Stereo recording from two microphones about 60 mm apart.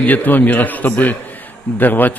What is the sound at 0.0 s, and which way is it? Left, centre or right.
A man's voice, left.